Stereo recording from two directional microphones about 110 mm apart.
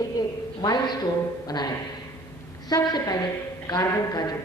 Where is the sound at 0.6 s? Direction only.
40° left (ahead or behind).